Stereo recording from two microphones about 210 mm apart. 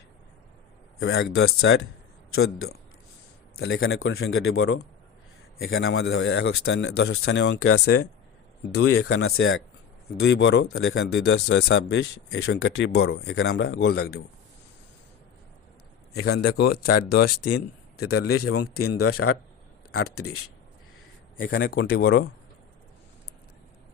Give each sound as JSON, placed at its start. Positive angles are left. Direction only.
{"t": 0.9, "sound": "a man's voice", "side_deg": 50}
{"t": 2.3, "sound": "a man's voice", "side_deg": 75}
{"t": 10.2, "sound": "speech", "side_deg": 55}
{"t": 13.0, "sound": "a man's voice", "side_deg": 70}
{"t": 16.1, "sound": "a man's voice", "side_deg": 50}
{"t": 18.3, "sound": "speech", "side_deg": 90}
{"t": 21.4, "sound": "speech", "side_deg": 50}